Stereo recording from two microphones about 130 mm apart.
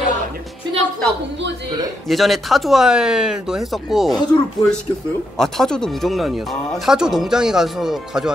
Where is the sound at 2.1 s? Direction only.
Centre (ahead or behind).